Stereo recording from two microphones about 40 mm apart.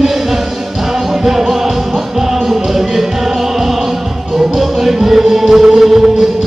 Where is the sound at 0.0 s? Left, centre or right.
Centre.